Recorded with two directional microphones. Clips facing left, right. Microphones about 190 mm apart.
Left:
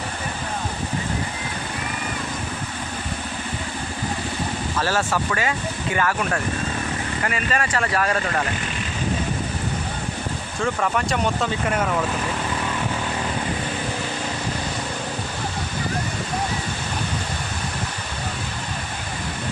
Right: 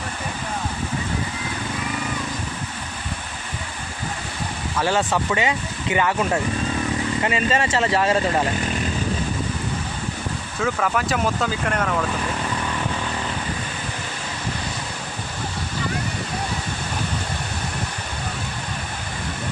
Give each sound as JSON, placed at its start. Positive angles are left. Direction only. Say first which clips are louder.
{"t": 4.8, "sound": "speech", "louder": "right 3 dB", "side_deg": -20}
{"t": 10.6, "sound": "speech", "louder": "even", "side_deg": 0}